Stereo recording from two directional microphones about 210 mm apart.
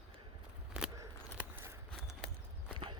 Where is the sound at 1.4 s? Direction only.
5° right (ahead or behind).